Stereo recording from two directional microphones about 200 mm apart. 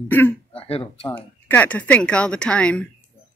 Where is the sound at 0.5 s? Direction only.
30° left (ahead or behind).